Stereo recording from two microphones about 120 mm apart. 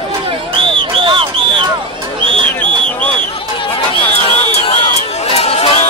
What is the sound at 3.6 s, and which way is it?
Chatter, 50° left (ahead or behind).